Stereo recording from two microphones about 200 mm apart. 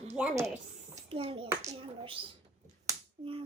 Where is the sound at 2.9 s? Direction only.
25° right (ahead or behind).